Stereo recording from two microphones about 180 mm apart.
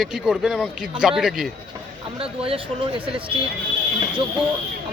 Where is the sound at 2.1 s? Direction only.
30° right (ahead or behind).